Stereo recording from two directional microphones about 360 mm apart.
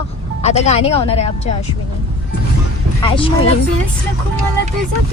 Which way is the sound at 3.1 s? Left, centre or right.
Centre.